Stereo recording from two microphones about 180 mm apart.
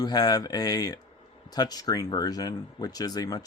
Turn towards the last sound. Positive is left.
turn(degrees=20)  # may be behind; listen again after turning